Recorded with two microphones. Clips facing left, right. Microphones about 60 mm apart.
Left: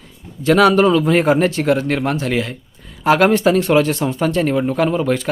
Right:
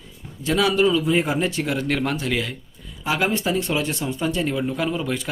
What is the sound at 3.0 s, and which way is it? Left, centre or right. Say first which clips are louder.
Speech: left 10 dB; left.